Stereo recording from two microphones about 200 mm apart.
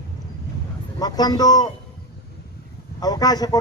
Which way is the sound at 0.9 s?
20° left (ahead or behind).